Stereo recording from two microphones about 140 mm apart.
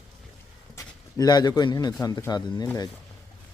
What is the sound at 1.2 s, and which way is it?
Speech, 30° left (ahead or behind).